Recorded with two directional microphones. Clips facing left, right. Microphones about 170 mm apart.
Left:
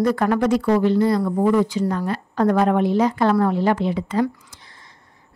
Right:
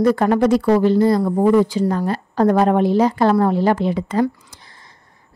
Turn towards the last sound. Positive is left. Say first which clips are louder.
# right 1 dB
turn(degrees=-35)  # may be behind; listen again after turning